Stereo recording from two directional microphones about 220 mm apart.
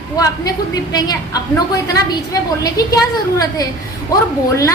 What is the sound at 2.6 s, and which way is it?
Speech, 15° left (ahead or behind).